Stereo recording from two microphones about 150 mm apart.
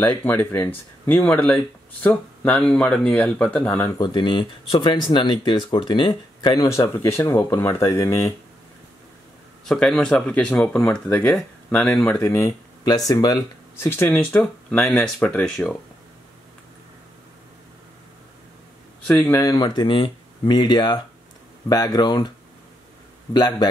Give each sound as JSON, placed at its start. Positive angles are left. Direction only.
{"t": 0.0, "sound": "speech", "side_deg": 15}
{"t": 4.0, "sound": "speech", "side_deg": 30}
{"t": 9.7, "sound": "speech", "side_deg": 5}
{"t": 13.8, "sound": "speech", "side_deg": 10}
{"t": 19.0, "sound": "speech", "side_deg": 10}
{"t": 19.4, "sound": "speech", "side_deg": 25}
{"t": 23.3, "sound": "speech", "side_deg": 25}